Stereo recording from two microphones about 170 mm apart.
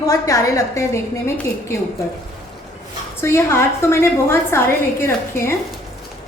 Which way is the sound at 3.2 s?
15° left (ahead or behind).